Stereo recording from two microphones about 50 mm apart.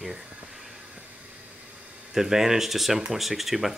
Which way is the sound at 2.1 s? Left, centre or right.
Centre.